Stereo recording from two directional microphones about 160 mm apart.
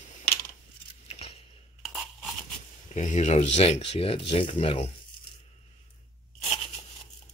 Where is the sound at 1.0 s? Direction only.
40° left (ahead or behind).